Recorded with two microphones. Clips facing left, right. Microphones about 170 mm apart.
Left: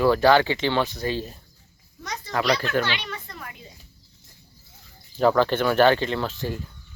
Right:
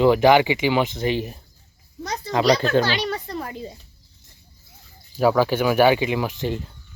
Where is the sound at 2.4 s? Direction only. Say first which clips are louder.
Right 5 dB; 35° right (ahead or behind).